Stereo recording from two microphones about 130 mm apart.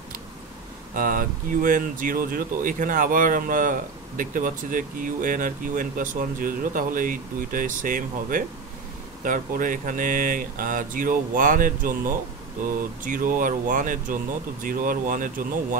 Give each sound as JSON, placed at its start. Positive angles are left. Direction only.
{"t": 0.9, "sound": "speech", "side_deg": -90}
{"t": 13.0, "sound": "speech", "side_deg": -90}